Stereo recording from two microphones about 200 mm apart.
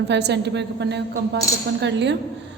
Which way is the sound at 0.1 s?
60° right (ahead or behind).